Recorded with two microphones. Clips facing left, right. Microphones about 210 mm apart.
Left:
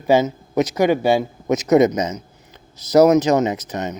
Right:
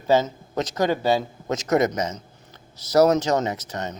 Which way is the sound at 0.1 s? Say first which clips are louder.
Left 4 dB; 10° left (ahead or behind).